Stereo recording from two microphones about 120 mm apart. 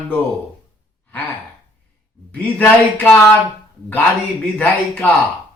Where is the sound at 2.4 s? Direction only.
15° left (ahead or behind).